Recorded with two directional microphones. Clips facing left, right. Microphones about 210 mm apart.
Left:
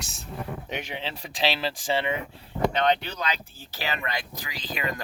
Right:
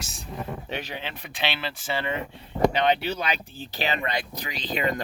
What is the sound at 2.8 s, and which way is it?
Speech, 5° right (ahead or behind).